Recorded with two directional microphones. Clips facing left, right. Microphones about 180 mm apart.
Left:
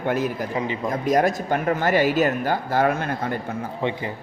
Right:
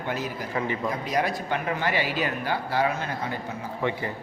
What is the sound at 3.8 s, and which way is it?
Speech, 20° left (ahead or behind).